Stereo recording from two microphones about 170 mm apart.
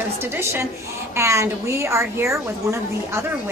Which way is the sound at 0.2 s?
15° right (ahead or behind).